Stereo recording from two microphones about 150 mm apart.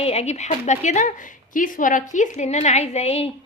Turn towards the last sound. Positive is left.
turn(degrees=40)  # may be behind; listen again after turning